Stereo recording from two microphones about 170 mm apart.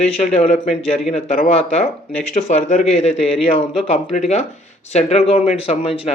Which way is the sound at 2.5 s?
40° left (ahead or behind).